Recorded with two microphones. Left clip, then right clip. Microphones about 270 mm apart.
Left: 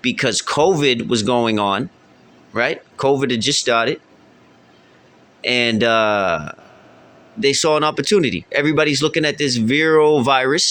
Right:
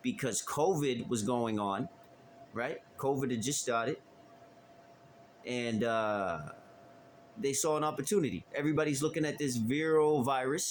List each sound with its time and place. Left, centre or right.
0.0 s speech: right
5.4 s speech: right